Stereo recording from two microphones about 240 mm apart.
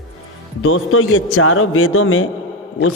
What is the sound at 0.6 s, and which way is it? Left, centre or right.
A man's voice, left.